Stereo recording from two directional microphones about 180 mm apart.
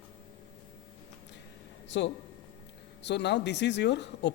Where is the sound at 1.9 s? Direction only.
85° left.